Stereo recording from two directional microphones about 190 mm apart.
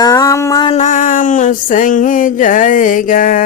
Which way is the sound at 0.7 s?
40° left (ahead or behind).